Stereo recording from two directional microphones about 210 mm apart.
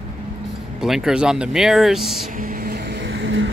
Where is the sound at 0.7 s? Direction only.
Centre (ahead or behind).